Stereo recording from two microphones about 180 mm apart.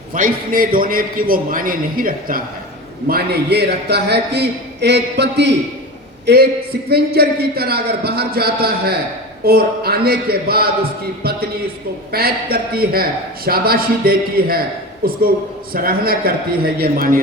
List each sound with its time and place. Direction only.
0.1 s a man's voice: 50° right (ahead or behind)
3.1 s a man's voice: 65° right (ahead or behind)